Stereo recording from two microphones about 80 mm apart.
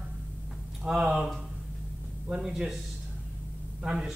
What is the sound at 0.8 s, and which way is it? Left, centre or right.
Speech, centre.